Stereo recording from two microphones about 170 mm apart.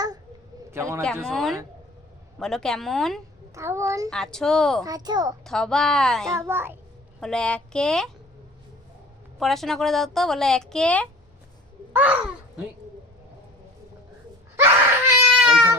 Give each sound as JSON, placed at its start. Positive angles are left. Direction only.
{"t": 0.7, "sound": "a man's voice", "side_deg": -15}
{"t": 1.2, "sound": "a woman's voice", "side_deg": 0}
{"t": 3.5, "sound": "a child's voice", "side_deg": -15}
{"t": 4.1, "sound": "a woman's voice", "side_deg": 5}
{"t": 4.8, "sound": "a child's voice", "side_deg": -20}
{"t": 5.5, "sound": "a woman's voice", "side_deg": 5}
{"t": 6.3, "sound": "a child's voice", "side_deg": -15}
{"t": 7.2, "sound": "a woman's voice", "side_deg": 5}
{"t": 9.4, "sound": "a woman's voice", "side_deg": 0}
{"t": 11.9, "sound": "a child's voice", "side_deg": -10}
{"t": 14.5, "sound": "cat", "side_deg": -15}